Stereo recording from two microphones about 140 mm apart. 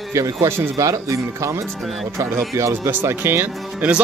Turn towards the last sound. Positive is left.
turn(degrees=-10)  # may be behind; listen again after turning